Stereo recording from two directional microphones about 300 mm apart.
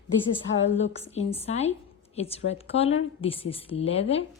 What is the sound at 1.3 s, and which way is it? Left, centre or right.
A woman's voice, centre.